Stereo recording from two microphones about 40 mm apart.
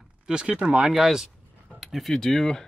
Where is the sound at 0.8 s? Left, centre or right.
Centre.